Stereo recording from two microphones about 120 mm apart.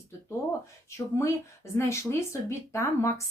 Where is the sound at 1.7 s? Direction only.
25° left (ahead or behind).